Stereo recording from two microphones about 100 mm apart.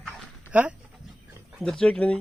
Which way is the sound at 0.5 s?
15° right (ahead or behind).